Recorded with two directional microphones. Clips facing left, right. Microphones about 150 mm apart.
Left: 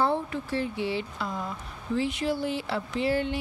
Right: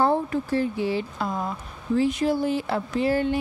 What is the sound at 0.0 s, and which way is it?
Speech, 45° right (ahead or behind).